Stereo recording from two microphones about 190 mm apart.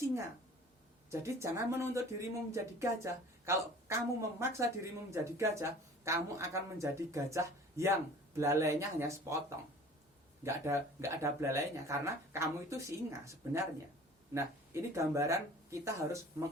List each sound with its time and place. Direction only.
1.1 s a woman's voice: 15° right (ahead or behind)
10.4 s a woman's voice: 15° right (ahead or behind)